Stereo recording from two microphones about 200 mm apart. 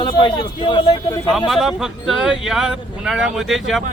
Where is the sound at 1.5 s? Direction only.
Centre (ahead or behind).